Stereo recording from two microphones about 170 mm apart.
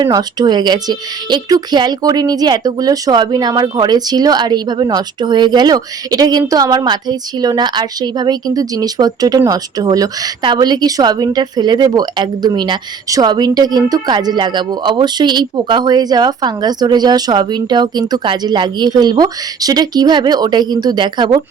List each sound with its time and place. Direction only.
0.0 s speech: 25° right (ahead or behind)